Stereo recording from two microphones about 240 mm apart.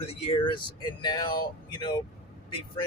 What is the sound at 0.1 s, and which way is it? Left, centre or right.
Speech, left.